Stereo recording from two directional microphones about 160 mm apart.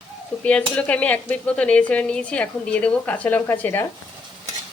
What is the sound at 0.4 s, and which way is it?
Speech, 10° left (ahead or behind).